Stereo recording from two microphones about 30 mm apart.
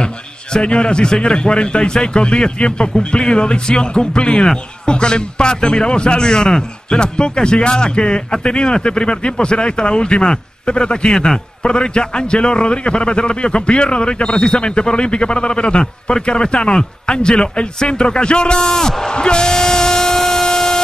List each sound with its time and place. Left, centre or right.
0.0 s a sound: left
1.2 s a man's voice: left
11.1 s a man's voice: left
18.7 s a man's voice: centre
19.4 s a sound: centre
20.4 s vehicle: centre